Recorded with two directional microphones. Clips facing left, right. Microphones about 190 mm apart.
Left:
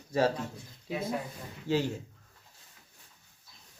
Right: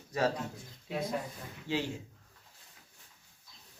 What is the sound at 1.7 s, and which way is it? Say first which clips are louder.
Speech: left 5 dB; 40° left (ahead or behind).